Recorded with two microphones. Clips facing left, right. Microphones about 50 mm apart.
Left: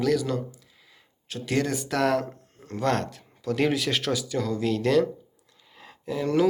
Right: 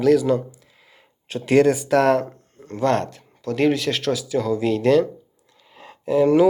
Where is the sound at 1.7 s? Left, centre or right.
Centre.